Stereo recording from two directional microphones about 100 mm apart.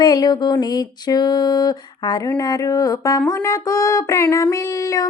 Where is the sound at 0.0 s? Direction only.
40° left (ahead or behind).